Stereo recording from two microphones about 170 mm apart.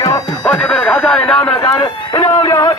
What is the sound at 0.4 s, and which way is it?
Speech, 5° left (ahead or behind).